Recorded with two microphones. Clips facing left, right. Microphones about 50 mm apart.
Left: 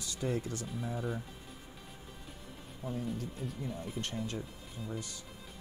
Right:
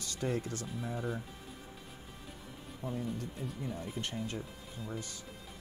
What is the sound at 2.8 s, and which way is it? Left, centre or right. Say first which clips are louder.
Speech: even; right.